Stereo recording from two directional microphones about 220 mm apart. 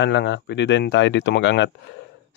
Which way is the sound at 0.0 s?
55° left (ahead or behind).